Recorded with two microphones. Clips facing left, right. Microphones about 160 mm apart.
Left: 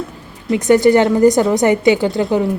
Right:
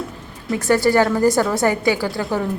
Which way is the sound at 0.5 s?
20° left (ahead or behind).